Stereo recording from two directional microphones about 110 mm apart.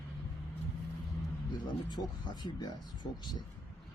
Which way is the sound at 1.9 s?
40° left (ahead or behind).